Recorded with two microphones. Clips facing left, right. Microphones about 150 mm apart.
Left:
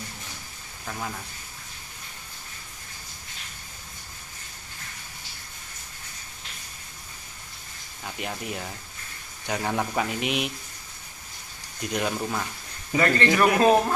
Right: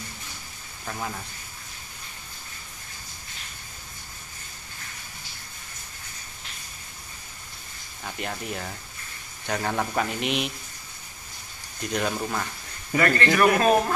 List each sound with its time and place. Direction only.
0.8 s speech: 5° right (ahead or behind)
8.0 s speech: 5° left (ahead or behind)
11.8 s speech: 5° left (ahead or behind)
12.9 s a man's voice: 20° left (ahead or behind)
13.7 s speech: 10° left (ahead or behind)